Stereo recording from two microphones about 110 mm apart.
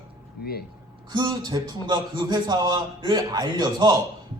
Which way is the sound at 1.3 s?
35° right (ahead or behind).